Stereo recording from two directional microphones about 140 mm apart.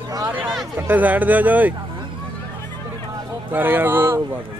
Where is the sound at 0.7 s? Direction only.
10° right (ahead or behind).